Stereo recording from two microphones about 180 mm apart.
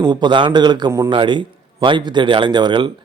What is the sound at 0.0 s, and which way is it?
A man's voice, 25° right (ahead or behind).